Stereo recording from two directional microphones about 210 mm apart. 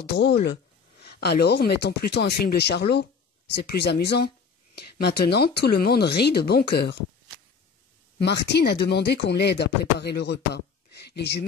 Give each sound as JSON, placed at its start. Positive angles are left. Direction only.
{"t": 0.1, "sound": "speech", "side_deg": 50}
{"t": 8.2, "sound": "speech", "side_deg": 50}